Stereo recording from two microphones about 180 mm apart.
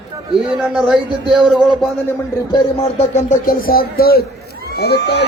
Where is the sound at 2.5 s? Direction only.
35° left (ahead or behind); by 4.2 s 55° left (ahead or behind).